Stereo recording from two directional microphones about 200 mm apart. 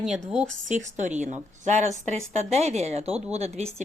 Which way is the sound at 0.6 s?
35° right (ahead or behind).